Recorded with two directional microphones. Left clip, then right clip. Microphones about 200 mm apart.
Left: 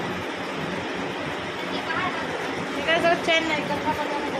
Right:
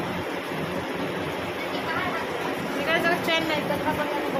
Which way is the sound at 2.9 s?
15° left (ahead or behind).